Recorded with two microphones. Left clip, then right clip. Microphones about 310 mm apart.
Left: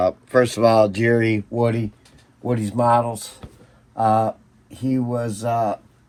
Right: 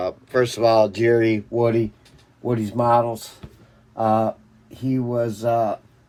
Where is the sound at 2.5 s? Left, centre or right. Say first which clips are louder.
Left 1 dB; left.